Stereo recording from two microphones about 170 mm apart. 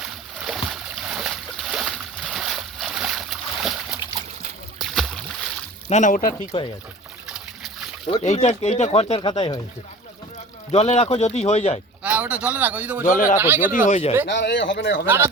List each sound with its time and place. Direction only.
0.0 s boat: centre (ahead or behind)
4.8 s a sound: centre (ahead or behind)
5.9 s speech: 45° left (ahead or behind)
6.5 s speech: 30° left (ahead or behind)
7.3 s a sound: 5° right (ahead or behind)
8.0 s speech: 35° left (ahead or behind)
10.7 s speech: 40° left (ahead or behind)
12.0 s a man's voice: 10° right (ahead or behind)
13.1 s speech: 50° left (ahead or behind)
13.4 s a man's voice: 10° right (ahead or behind)
13.8 s speech: 40° left (ahead or behind)
14.3 s speech: 90° left
14.6 s speech: 65° left (ahead or behind)
15.0 s a man's voice: 15° right (ahead or behind)